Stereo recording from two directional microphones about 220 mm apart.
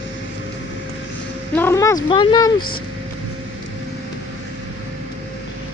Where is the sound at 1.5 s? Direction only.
10° left (ahead or behind).